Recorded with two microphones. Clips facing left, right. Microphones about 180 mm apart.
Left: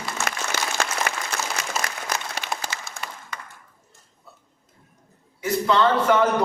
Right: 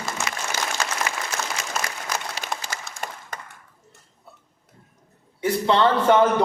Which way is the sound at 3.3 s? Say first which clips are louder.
Right 1 dB; 45° right (ahead or behind).